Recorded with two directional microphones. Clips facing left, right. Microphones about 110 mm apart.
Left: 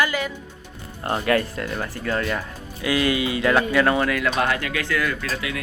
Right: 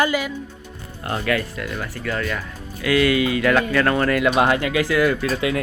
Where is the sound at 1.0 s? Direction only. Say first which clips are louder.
Left 2 dB; 30° left (ahead or behind); by 4.1 s 15° left (ahead or behind).